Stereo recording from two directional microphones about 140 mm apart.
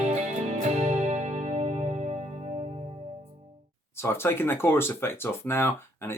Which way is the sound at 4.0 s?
15° left (ahead or behind).